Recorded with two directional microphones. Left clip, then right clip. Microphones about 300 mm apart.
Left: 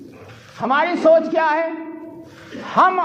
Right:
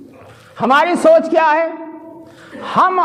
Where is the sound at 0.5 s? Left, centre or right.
Right.